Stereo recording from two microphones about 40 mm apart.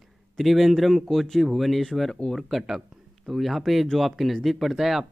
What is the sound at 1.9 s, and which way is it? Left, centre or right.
Speech, centre.